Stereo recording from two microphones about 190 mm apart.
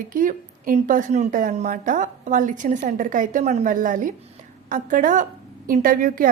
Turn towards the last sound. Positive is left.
turn(degrees=-45)  # may be behind; listen again after turning